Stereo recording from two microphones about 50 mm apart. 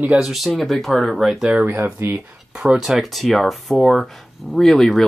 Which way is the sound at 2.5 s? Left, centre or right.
Centre.